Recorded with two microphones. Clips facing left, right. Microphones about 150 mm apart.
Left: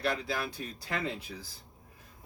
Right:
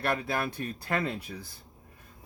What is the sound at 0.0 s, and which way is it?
Speech, 55° right (ahead or behind).